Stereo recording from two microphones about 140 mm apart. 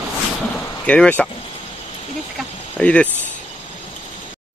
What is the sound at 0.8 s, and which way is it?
Speech, 10° left (ahead or behind).